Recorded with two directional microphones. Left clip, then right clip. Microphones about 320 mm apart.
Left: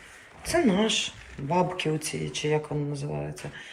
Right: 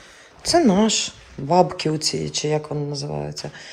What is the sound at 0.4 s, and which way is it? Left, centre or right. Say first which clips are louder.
Speech: right 7 dB; centre.